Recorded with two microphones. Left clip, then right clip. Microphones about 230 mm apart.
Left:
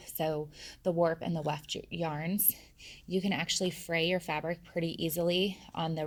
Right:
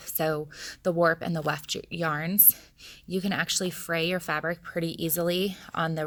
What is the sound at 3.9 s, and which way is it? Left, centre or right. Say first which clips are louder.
Speech: right 3 dB; right.